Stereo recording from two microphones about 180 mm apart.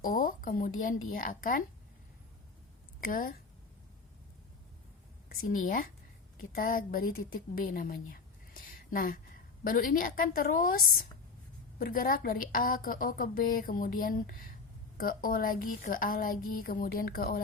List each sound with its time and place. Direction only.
0.0 s speech: 50° left (ahead or behind)
3.1 s a woman's voice: 50° left (ahead or behind)
5.3 s a woman's voice: 50° left (ahead or behind)